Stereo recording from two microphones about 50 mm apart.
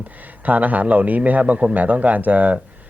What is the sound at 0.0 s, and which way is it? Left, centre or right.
Speech, right.